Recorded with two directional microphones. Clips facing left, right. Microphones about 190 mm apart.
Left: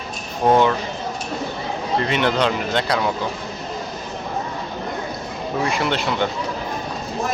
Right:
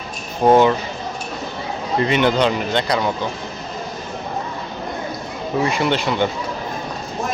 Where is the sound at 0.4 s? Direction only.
10° right (ahead or behind).